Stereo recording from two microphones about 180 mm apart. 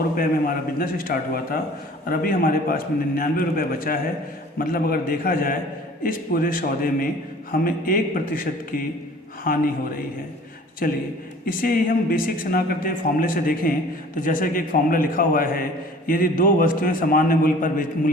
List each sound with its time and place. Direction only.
0.2 s speech: 55° left (ahead or behind)
10.8 s speech: 55° left (ahead or behind)